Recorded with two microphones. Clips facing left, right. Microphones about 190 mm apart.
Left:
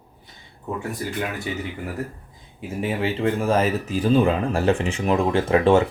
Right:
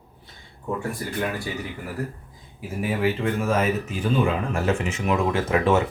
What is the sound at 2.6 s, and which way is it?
Speech, 30° left (ahead or behind).